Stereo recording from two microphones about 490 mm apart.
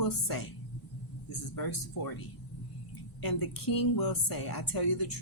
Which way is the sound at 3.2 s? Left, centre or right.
Left.